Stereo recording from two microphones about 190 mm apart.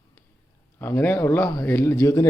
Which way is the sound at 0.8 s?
10° left (ahead or behind).